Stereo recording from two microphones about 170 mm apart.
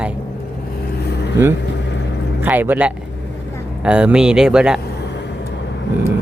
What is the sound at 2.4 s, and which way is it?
Speech, 10° right (ahead or behind).